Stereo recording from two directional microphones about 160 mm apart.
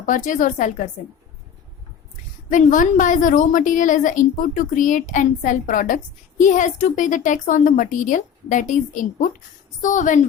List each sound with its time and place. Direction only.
0.0 s a woman's voice: 55° left (ahead or behind)
2.5 s a woman's voice: 50° left (ahead or behind)